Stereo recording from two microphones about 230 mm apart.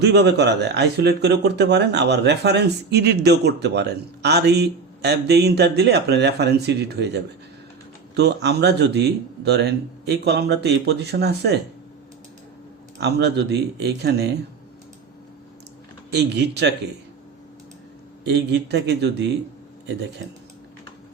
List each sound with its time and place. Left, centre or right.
0.0 s speech: right
13.0 s speech: right
16.1 s speech: right
18.3 s speech: right